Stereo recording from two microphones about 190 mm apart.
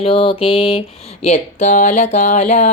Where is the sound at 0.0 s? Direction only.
30° left (ahead or behind).